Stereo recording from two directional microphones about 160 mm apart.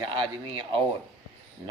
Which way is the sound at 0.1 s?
30° right (ahead or behind).